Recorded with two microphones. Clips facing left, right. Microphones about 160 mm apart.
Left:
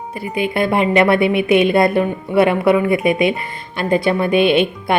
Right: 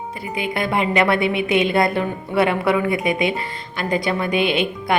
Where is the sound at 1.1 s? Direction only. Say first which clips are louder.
Left 5 dB; 20° right (ahead or behind).